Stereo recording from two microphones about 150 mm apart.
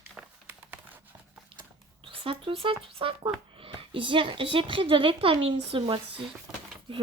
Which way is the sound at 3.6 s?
35° right (ahead or behind).